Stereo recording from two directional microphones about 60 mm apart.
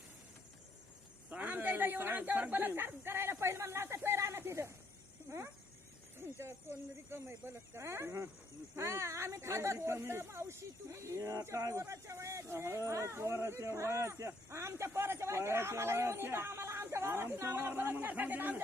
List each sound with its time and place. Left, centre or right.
1.3 s speech: right